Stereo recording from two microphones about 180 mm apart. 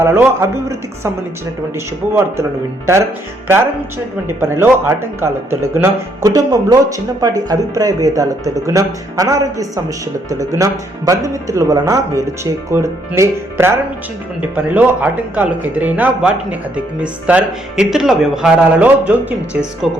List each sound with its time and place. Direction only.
0.0 s speech: 15° right (ahead or behind)
2.1 s speech: 15° right (ahead or behind)
4.3 s speech: 10° right (ahead or behind)